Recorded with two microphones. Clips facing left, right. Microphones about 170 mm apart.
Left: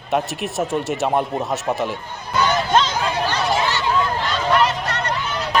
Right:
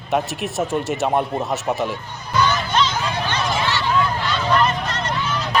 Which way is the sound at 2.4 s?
45° left (ahead or behind).